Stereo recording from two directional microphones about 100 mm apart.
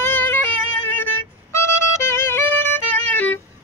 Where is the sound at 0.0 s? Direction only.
20° left (ahead or behind).